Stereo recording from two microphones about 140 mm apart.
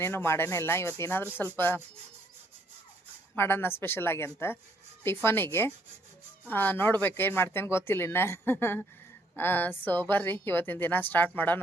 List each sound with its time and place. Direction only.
0.0 s speech: 15° left (ahead or behind)
3.3 s speech: 15° left (ahead or behind)